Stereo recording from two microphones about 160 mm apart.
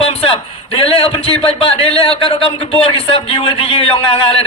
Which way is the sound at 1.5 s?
35° left (ahead or behind).